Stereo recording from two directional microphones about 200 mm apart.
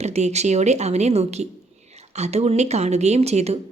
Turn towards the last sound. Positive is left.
turn(degrees=-30)  # may be behind; listen again after turning